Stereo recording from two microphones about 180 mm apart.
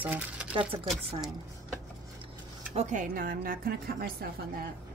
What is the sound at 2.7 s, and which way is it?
Speech, 40° right (ahead or behind).